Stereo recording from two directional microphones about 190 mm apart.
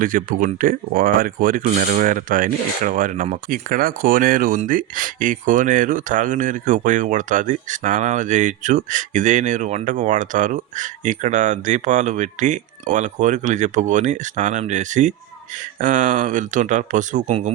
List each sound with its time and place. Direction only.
0.0 s speech: 45° right (ahead or behind)